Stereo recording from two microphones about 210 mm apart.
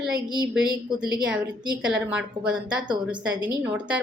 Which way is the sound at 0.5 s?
5° right (ahead or behind).